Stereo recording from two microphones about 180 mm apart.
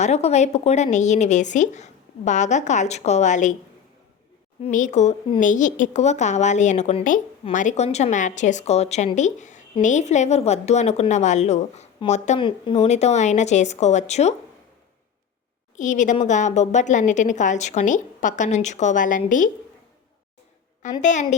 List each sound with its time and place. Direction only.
0.0 s speech: 35° left (ahead or behind)
4.6 s speech: 40° left (ahead or behind)
12.4 s speech: 25° left (ahead or behind)
15.7 s a woman's voice: 45° left (ahead or behind)
21.0 s speech: 40° left (ahead or behind)